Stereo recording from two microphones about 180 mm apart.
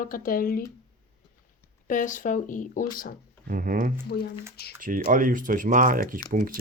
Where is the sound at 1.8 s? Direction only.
45° left (ahead or behind).